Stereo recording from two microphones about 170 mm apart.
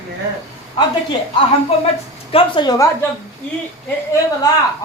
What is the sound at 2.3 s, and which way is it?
Speech, 30° left (ahead or behind).